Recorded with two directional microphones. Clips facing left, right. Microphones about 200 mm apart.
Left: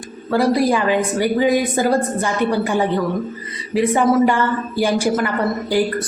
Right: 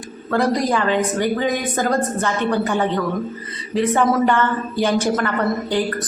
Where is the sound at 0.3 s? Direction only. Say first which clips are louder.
Left 3 dB; 10° left (ahead or behind).